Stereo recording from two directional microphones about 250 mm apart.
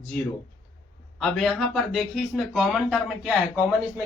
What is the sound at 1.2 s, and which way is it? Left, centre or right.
Speech, centre.